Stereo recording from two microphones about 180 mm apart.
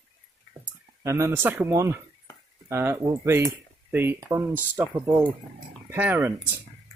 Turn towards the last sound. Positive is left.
turn(degrees=-10)  # may be behind; listen again after turning